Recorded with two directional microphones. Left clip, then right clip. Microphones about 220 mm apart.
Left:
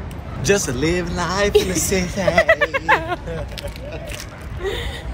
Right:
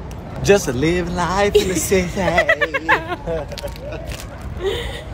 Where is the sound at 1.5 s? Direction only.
Centre (ahead or behind).